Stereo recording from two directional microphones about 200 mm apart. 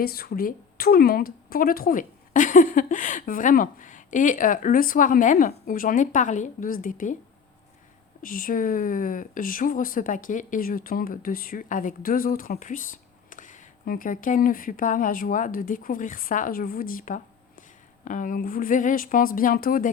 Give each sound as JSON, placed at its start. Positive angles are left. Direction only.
{"t": 0.0, "sound": "speech", "side_deg": 50}
{"t": 8.2, "sound": "speech", "side_deg": 45}